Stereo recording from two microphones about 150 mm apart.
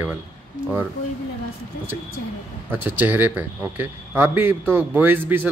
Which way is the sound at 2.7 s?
15° right (ahead or behind).